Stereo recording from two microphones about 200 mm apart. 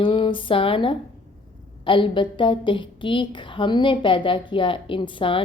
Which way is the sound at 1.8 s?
25° left (ahead or behind).